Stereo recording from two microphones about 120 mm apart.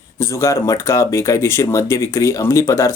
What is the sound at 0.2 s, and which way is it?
Speech, 25° left (ahead or behind).